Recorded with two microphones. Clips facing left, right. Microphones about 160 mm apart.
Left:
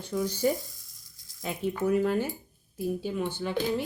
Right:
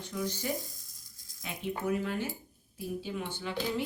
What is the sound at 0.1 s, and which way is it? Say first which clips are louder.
Speech: left 6 dB; 50° left (ahead or behind).